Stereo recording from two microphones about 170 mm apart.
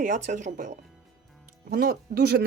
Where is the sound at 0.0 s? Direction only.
50° right (ahead or behind).